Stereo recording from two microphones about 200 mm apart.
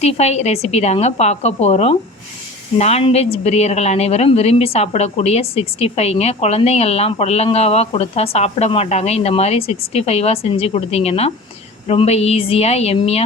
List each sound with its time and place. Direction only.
0.0 s a woman's voice: 30° left (ahead or behind)